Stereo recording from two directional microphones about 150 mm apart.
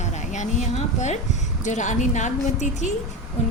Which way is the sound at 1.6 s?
55° left (ahead or behind).